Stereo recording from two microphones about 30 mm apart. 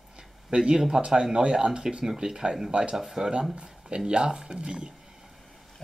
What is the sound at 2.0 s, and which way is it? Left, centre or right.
Speech, right.